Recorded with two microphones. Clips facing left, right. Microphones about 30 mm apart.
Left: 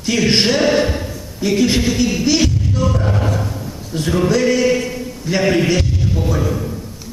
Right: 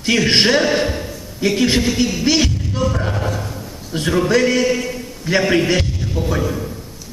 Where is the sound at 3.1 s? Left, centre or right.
Centre.